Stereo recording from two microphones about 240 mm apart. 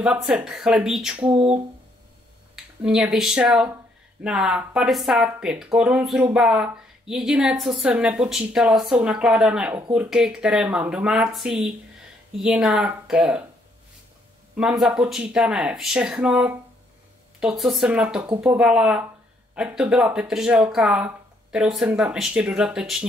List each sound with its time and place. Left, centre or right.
0.0 s speech: centre
1.3 s a sound: right
2.5 s speech: centre
14.6 s speech: centre